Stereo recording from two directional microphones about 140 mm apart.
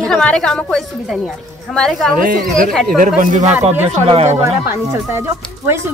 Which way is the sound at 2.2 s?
80° right.